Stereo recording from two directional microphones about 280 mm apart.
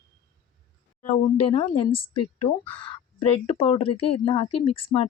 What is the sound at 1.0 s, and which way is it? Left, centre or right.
Speech, left.